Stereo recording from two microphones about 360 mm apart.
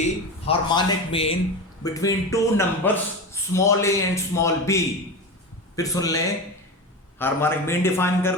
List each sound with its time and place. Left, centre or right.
0.0 s a man's voice: centre